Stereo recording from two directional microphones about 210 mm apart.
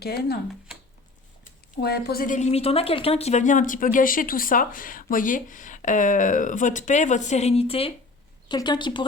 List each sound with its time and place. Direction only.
0.0 s speech: 50° left (ahead or behind)
1.7 s a woman's voice: 50° left (ahead or behind); by 9.0 s 20° left (ahead or behind)